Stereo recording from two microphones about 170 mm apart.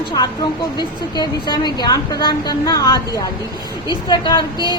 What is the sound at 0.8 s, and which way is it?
A woman's voice, 25° left (ahead or behind).